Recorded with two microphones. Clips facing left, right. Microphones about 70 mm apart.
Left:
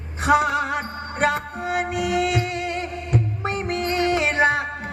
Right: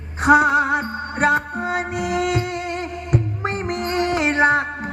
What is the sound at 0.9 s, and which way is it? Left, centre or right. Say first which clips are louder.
Music: right 4 dB; right.